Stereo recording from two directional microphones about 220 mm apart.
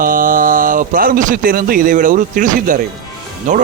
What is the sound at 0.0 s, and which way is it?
A man's voice, 40° right (ahead or behind).